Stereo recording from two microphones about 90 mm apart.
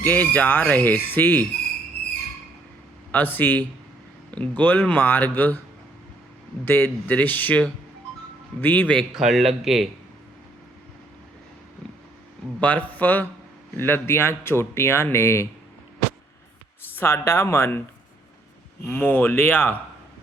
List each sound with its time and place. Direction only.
0.0 s speech: 20° left (ahead or behind)
3.1 s speech: 20° left (ahead or behind)
6.7 s speech: 20° left (ahead or behind)
9.1 s speech: 5° right (ahead or behind)
12.5 s a man's voice: 15° left (ahead or behind); by 15.4 s 30° left (ahead or behind)
16.9 s speech: 25° left (ahead or behind)
18.9 s speech: 20° left (ahead or behind)